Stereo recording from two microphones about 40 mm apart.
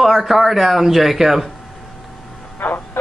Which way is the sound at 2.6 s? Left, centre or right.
Left.